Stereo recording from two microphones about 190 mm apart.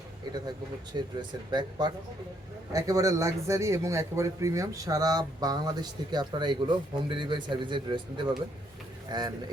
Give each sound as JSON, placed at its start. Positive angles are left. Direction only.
{"t": 0.9, "sound": "speech", "side_deg": -25}